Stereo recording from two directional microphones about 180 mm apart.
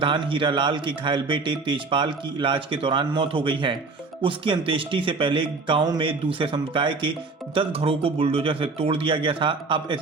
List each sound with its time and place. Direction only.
0.0 s speech: 30° right (ahead or behind)